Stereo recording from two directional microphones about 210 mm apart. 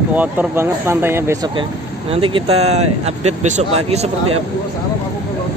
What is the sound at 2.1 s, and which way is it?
Speech, 25° right (ahead or behind).